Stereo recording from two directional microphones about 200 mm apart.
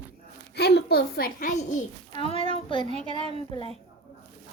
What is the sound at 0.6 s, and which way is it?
A woman's voice, 55° left (ahead or behind).